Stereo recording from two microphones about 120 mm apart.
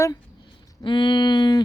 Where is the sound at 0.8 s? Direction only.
40° left (ahead or behind).